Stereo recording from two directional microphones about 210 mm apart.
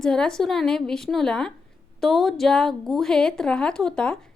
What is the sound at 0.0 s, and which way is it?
A woman's voice, 5° left (ahead or behind).